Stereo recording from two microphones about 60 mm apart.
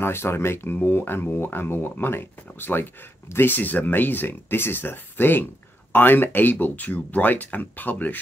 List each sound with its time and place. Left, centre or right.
0.0 s speech: left